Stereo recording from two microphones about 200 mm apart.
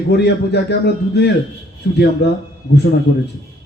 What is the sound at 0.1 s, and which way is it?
A man's voice, 55° left (ahead or behind).